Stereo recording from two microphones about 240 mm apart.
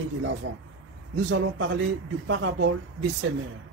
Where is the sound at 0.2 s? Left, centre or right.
Right.